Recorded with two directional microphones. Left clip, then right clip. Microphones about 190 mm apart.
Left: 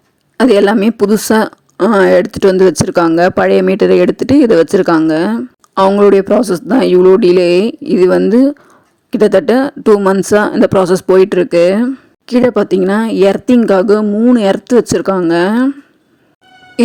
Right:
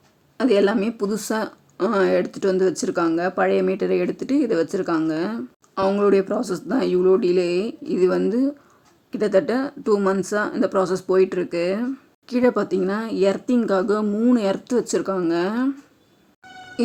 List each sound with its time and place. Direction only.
0.3 s speech: 50° left (ahead or behind)